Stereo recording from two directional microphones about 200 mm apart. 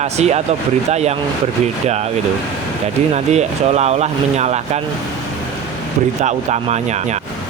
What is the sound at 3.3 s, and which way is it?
Speech, 35° right (ahead or behind).